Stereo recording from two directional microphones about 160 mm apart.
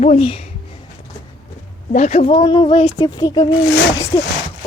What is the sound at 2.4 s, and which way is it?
Speech, 30° left (ahead or behind).